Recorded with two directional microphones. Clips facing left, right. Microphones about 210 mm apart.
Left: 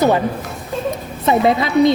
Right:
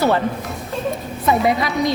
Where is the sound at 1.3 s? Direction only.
25° left (ahead or behind).